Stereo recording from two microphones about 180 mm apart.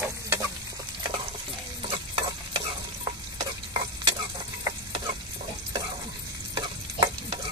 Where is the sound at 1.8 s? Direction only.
30° right (ahead or behind).